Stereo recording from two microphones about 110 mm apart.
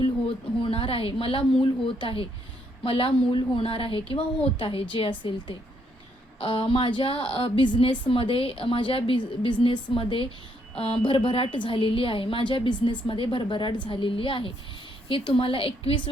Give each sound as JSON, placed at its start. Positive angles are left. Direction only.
{"t": 0.6, "sound": "a woman's voice", "side_deg": 55}